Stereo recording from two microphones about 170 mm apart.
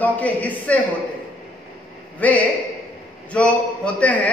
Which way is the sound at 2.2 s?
10° left (ahead or behind).